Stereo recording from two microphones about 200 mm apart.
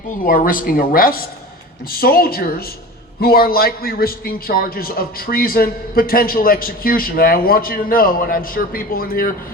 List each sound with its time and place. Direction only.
0.2 s a man's voice: 45° left (ahead or behind)